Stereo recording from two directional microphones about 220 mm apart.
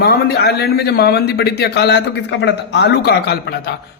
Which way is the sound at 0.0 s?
45° left (ahead or behind).